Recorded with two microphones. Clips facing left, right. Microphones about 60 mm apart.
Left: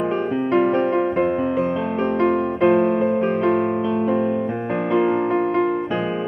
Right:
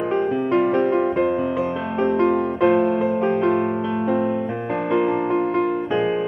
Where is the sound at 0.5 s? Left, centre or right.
Left.